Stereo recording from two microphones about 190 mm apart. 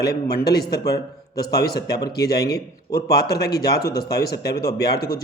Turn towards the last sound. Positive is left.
turn(degrees=55)  # may be behind; listen again after turning